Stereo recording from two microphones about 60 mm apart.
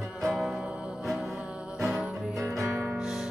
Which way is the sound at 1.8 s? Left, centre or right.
Centre.